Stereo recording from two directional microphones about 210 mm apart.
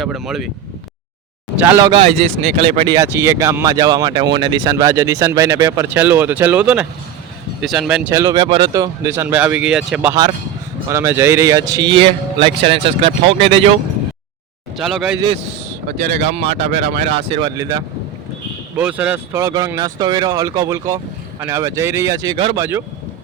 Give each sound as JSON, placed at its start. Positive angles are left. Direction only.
{"t": 0.0, "sound": "speech", "side_deg": 0}
{"t": 1.5, "sound": "speech", "side_deg": -10}
{"t": 1.9, "sound": "a man's voice", "side_deg": -25}
{"t": 14.8, "sound": "speech", "side_deg": 0}
{"t": 16.3, "sound": "a man's voice", "side_deg": -30}
{"t": 18.8, "sound": "speech", "side_deg": -5}